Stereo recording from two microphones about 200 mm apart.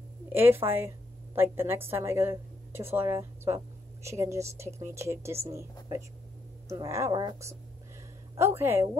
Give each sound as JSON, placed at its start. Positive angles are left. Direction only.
{"t": 0.3, "sound": "a woman's voice", "side_deg": -10}